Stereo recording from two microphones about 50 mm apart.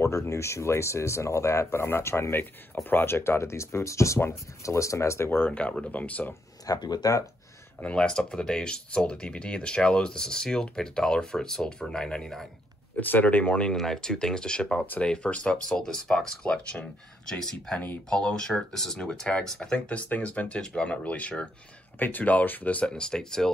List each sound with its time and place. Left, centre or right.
0.0 s speech: left
2.7 s speech: left
3.2 s speech: left
4.2 s speech: left
5.5 s speech: left
7.8 s speech: centre
12.9 s speech: left
13.7 s speech: centre
16.4 s speech: left
17.3 s speech: centre
19.9 s speech: left
21.9 s speech: left; by 23.5 s centre